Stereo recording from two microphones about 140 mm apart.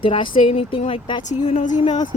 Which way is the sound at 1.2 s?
60° left (ahead or behind).